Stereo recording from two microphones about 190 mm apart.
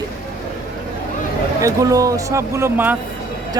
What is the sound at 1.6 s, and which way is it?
Speech, 15° right (ahead or behind).